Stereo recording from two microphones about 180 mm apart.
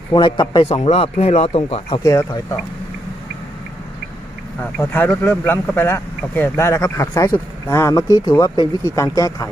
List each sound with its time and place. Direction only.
0.1 s speech: 25° left (ahead or behind)
0.7 s speech: 35° left (ahead or behind)
2.0 s speech: 15° left (ahead or behind)
4.6 s speech: 10° left (ahead or behind)